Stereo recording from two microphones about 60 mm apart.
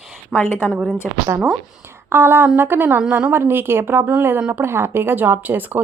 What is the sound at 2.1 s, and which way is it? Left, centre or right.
Speech, right.